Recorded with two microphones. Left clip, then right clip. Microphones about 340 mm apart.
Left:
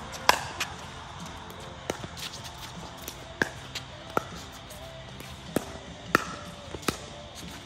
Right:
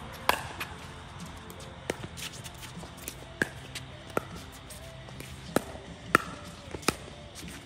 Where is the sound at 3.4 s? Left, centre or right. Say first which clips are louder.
Left 3 dB; centre.